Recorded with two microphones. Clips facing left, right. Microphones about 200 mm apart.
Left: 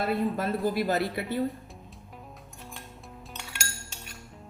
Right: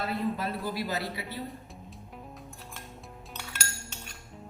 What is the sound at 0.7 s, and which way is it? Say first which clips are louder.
Speech: left 6 dB; 50° left (ahead or behind).